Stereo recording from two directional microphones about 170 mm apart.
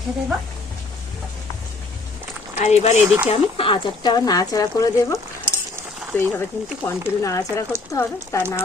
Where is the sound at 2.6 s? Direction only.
40° left (ahead or behind).